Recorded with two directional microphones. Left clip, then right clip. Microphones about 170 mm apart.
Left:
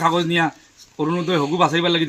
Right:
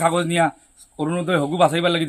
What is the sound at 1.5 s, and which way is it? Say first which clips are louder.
Speech: even; 30° right (ahead or behind).